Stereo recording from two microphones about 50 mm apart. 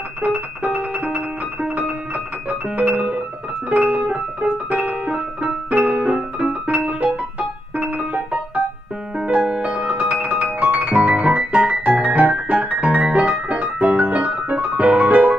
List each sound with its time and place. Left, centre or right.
0.2 s music: right
2.8 s piano: right
3.7 s music: right
4.1 s music: centre
5.8 s piano: right
6.0 s piano: centre
9.2 s music: right